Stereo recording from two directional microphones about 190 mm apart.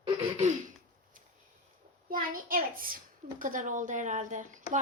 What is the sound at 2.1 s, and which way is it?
A woman's voice, 45° right (ahead or behind).